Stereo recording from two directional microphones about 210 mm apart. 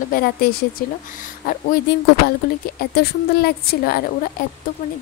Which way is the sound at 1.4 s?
45° left (ahead or behind).